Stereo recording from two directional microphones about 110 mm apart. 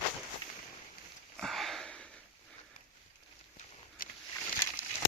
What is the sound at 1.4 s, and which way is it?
Sniff, centre (ahead or behind).